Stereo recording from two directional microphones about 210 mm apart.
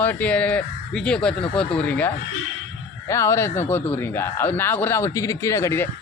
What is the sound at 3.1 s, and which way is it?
Speech, 15° left (ahead or behind).